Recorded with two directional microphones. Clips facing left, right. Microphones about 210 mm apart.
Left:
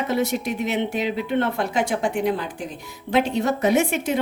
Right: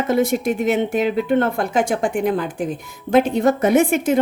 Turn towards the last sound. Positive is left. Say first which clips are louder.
# right 5 dB
turn(degrees=-50)  # may be behind; listen again after turning